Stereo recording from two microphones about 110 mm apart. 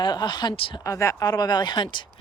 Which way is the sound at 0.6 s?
55° left (ahead or behind).